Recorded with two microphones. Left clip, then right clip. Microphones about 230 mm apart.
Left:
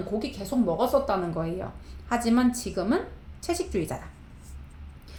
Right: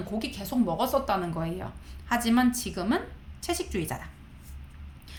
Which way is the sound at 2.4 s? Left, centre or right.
Right.